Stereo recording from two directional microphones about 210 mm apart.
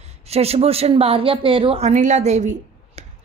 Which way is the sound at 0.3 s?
30° right (ahead or behind).